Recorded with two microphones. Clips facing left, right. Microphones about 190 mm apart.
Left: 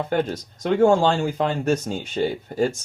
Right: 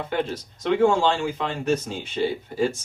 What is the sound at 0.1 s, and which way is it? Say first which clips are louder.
Speech: left 3 dB; 45° left (ahead or behind).